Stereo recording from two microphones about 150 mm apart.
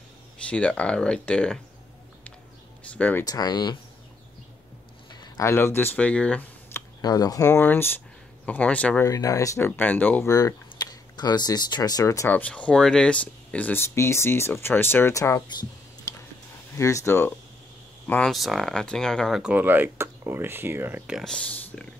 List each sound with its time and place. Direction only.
0.5 s speech: 10° left (ahead or behind)
2.8 s speech: 10° left (ahead or behind)
3.3 s speech: 25° left (ahead or behind)
5.1 s a sound: 30° left (ahead or behind)
5.5 s speech: 15° left (ahead or behind)
7.0 s speech: 25° left (ahead or behind); by 9.1 s 10° left (ahead or behind)
9.1 s speech: 20° left (ahead or behind)
10.3 s speech: 25° left (ahead or behind)
16.7 s speech: 20° left (ahead or behind)
18.3 s speech: centre (ahead or behind)
19.5 s speech: 15° right (ahead or behind)
21.2 s speech: 5° left (ahead or behind)